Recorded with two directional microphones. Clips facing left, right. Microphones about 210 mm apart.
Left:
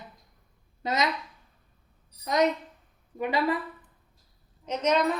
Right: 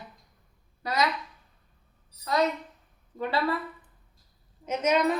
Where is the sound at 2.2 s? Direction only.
20° left (ahead or behind).